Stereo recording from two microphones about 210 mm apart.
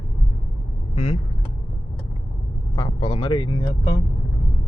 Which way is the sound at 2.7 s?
20° left (ahead or behind).